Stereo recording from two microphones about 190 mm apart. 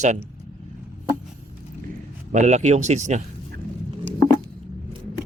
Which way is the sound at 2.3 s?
40° right (ahead or behind).